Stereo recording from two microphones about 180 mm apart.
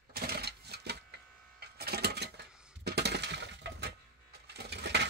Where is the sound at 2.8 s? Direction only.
65° right (ahead or behind).